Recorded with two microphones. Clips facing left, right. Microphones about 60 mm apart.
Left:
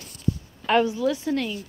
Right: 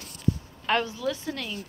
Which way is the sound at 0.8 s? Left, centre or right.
Centre.